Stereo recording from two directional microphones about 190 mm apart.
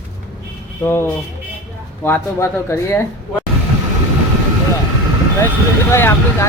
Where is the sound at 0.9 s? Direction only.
10° left (ahead or behind).